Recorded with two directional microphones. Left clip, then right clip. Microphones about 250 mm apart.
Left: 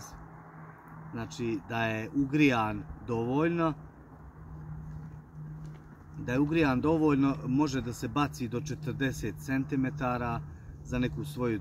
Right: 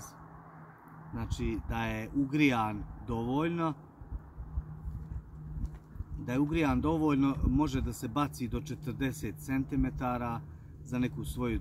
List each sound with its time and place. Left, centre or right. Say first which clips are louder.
1.1 s a man's voice: left 3 dB; centre
6.2 s a man's voice: left 3 dB; centre